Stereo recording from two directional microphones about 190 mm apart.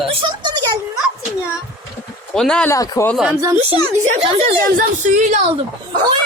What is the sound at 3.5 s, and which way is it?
Speech, 35° right (ahead or behind).